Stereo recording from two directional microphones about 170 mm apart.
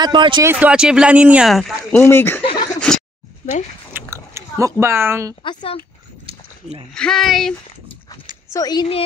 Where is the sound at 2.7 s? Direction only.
5° left (ahead or behind).